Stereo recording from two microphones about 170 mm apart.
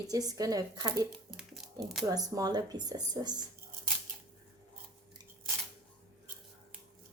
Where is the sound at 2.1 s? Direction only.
20° right (ahead or behind).